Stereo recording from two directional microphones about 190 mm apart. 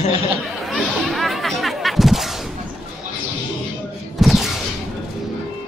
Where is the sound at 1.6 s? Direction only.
Centre (ahead or behind).